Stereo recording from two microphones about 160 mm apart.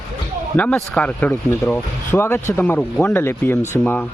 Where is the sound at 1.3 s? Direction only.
20° left (ahead or behind).